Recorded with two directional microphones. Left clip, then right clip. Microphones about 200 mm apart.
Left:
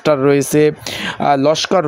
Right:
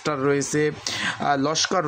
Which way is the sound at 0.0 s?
35° left (ahead or behind).